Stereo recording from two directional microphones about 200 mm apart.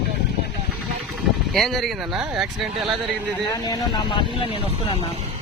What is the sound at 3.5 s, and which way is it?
Speech, 20° left (ahead or behind).